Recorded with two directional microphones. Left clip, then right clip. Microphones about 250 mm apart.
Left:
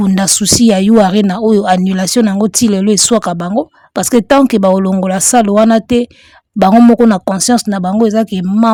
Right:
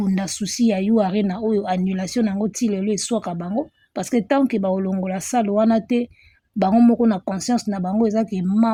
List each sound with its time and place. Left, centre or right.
0.0 s speech: left